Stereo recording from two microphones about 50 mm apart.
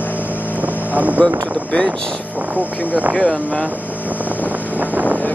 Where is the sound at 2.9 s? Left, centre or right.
Right.